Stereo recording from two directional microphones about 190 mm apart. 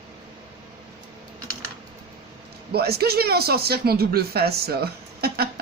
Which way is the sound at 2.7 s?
55° right (ahead or behind).